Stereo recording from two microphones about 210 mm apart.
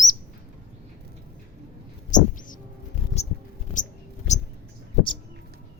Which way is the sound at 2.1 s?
35° left (ahead or behind).